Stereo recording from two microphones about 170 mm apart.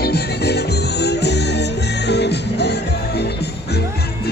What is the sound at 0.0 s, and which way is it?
Music, 70° left (ahead or behind).